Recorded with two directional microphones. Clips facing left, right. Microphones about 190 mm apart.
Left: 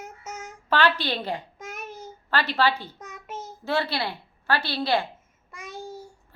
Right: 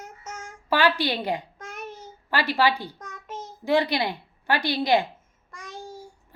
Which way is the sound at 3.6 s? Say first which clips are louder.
Right 4 dB; 15° right (ahead or behind).